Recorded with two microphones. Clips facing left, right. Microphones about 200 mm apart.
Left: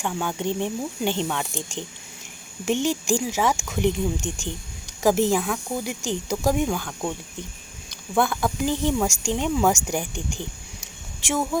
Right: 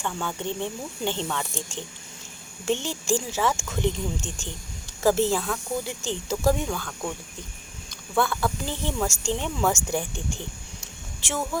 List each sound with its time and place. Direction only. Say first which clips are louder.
0.0 s speech: left 4 dB; 15° left (ahead or behind)
8.1 s speech: left 2 dB; 15° left (ahead or behind)